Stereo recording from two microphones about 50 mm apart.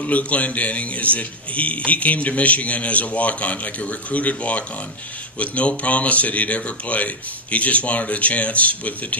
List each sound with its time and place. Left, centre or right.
0.0 s a man's voice: left